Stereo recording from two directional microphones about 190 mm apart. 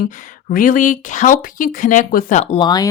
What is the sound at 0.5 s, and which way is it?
Speech, 45° left (ahead or behind).